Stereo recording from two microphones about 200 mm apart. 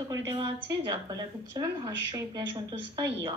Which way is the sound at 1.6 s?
20° right (ahead or behind).